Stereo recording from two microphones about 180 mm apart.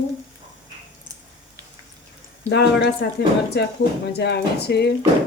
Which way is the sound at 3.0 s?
65° left (ahead or behind).